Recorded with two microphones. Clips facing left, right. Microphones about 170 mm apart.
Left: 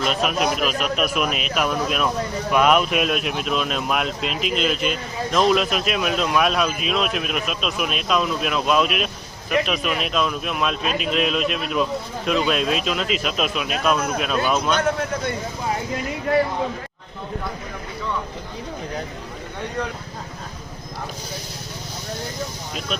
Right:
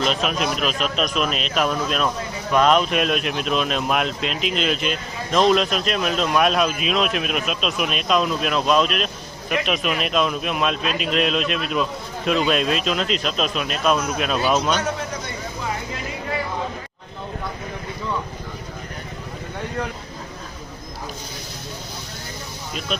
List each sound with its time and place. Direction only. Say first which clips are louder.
0.0 s a man's voice: left 1 dB; 5° left (ahead or behind)
14.8 s a man's voice: left 4 dB; 55° left (ahead or behind)